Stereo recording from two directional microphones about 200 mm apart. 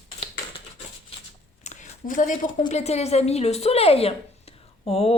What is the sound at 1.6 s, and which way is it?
A woman's voice, 40° left (ahead or behind).